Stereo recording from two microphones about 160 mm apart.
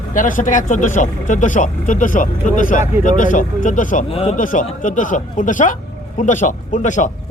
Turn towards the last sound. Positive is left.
turn(degrees=50)  # may be behind; listen again after turning